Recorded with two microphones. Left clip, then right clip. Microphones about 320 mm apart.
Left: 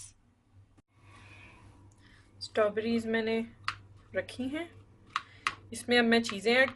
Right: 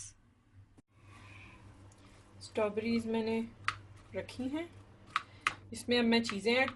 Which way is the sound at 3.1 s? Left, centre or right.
Left.